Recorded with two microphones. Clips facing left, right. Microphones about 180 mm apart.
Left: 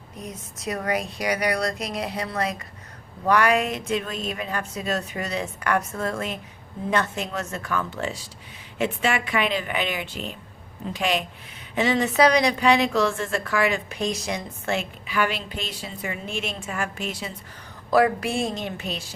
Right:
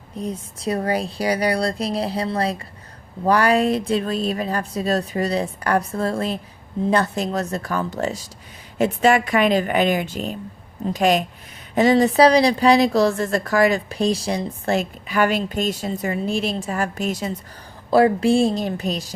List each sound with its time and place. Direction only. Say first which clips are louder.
0.2 s a woman's voice: right 9 dB; 30° right (ahead or behind)
17.9 s a woman's voice: right 5 dB; 30° right (ahead or behind)